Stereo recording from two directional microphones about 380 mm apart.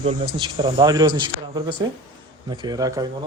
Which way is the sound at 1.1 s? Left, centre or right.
Right.